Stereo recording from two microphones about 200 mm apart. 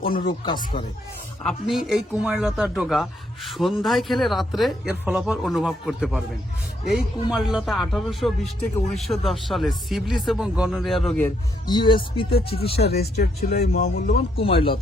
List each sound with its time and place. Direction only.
0.3 s speech: 20° left (ahead or behind)
1.5 s a man's voice: centre (ahead or behind)
11.2 s speech: 20° left (ahead or behind)
12.9 s speech: 55° left (ahead or behind)
14.3 s speech: 25° left (ahead or behind)